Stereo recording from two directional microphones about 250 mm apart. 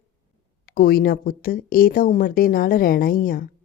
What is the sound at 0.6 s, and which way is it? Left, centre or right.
Speech, left.